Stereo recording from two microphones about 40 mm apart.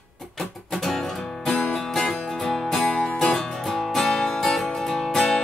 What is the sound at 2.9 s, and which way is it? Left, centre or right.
Music, centre.